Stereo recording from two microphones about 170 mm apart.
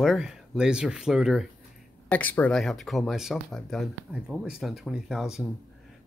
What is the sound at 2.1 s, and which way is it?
Speech, 10° left (ahead or behind).